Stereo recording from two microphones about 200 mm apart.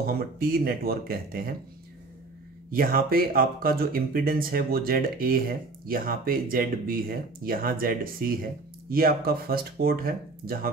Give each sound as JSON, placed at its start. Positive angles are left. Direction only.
{"t": 0.0, "sound": "speech", "side_deg": -50}
{"t": 2.7, "sound": "speech", "side_deg": -45}